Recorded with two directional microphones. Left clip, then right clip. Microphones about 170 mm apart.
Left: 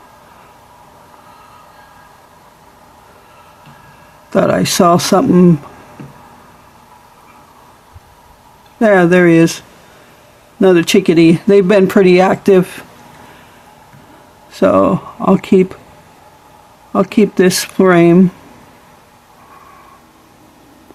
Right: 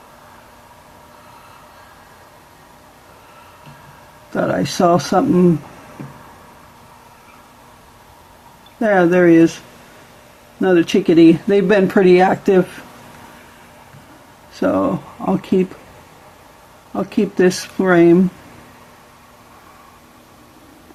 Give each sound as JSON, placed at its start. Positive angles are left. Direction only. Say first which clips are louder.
{"t": 4.3, "sound": "speech", "louder": "left 7 dB", "side_deg": 65}
{"t": 8.8, "sound": "speech", "louder": "left 4 dB", "side_deg": 65}
{"t": 10.6, "sound": "speech", "louder": "left 5 dB", "side_deg": 65}
{"t": 14.5, "sound": "speech", "louder": "left 7 dB", "side_deg": 60}
{"t": 16.9, "sound": "speech", "louder": "left 8 dB", "side_deg": 60}